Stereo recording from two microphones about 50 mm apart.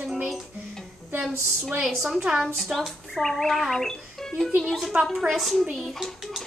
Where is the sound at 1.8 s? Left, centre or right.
Centre.